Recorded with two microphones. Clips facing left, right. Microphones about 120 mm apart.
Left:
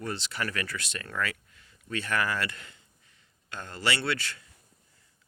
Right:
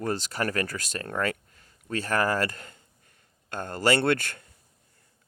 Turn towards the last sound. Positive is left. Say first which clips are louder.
# right 7 dB
turn(degrees=-50)  # may be behind; listen again after turning